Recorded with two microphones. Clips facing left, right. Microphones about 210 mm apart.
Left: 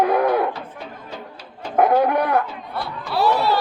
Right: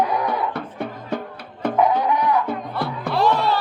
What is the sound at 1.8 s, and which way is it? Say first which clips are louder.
Chicken: left 3 dB; 55° left (ahead or behind).